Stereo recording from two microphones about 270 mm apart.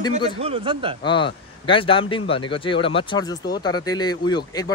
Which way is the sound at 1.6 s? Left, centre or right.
Centre.